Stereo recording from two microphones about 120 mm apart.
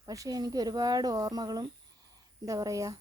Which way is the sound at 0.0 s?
30° right (ahead or behind).